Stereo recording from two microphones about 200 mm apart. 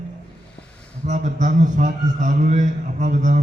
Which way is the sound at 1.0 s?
40° right (ahead or behind).